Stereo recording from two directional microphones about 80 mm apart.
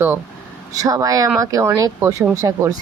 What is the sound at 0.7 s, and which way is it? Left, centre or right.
Speech, right.